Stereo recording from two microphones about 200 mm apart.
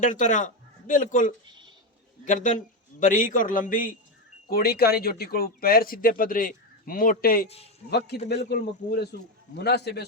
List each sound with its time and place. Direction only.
0.0 s a man's voice: 40° left (ahead or behind)
7.4 s a man's voice: 30° left (ahead or behind)
7.9 s speech: 55° left (ahead or behind)